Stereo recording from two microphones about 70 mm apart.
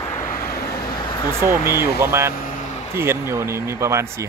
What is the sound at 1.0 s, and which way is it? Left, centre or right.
Speech, left.